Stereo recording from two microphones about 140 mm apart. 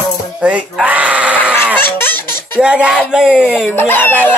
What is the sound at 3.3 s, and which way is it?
Speech, 10° left (ahead or behind).